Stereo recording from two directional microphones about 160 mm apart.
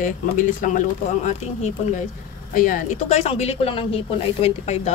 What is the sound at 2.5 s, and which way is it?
Speech, 60° left (ahead or behind).